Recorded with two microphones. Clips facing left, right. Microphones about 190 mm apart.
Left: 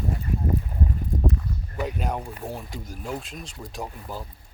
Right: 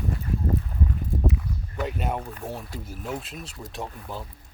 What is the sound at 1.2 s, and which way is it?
Walk, centre (ahead or behind).